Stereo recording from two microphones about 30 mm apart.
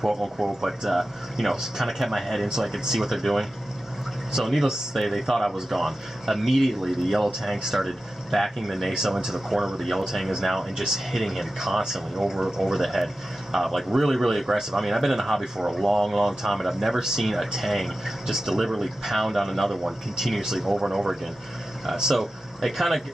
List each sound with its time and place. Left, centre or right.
0.4 s speech: centre
4.6 s speech: centre
5.7 s speech: centre
7.8 s speech: centre
8.9 s speech: centre
9.8 s speech: centre
14.6 s speech: centre
15.8 s speech: centre
17.0 s speech: centre
19.8 s speech: centre